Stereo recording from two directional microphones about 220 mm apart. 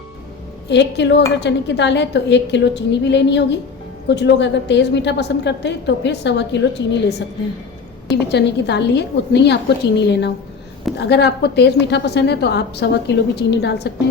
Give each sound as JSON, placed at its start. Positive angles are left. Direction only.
{"t": 0.7, "sound": "a woman's voice", "side_deg": 50}
{"t": 8.1, "sound": "a woman's voice", "side_deg": 50}